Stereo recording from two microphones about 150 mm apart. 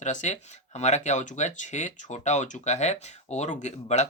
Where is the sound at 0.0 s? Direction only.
50° left (ahead or behind).